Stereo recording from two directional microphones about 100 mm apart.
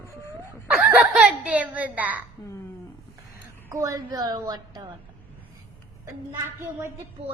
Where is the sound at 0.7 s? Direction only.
10° right (ahead or behind).